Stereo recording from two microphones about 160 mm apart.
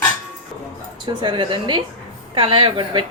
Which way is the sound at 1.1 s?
30° right (ahead or behind).